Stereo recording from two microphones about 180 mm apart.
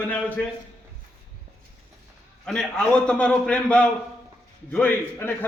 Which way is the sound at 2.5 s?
5° left (ahead or behind).